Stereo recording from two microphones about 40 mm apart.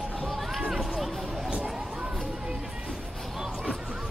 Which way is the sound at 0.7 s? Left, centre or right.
Centre.